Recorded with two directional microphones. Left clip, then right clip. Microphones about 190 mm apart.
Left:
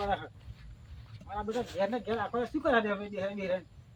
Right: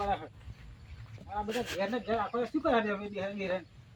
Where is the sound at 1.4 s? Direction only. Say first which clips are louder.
Left 3 dB; 5° right (ahead or behind).